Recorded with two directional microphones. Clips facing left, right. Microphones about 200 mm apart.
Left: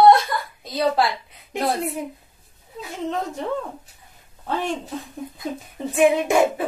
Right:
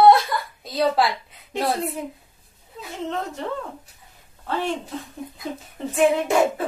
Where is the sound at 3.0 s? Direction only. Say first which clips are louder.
Left 2 dB; 15° left (ahead or behind).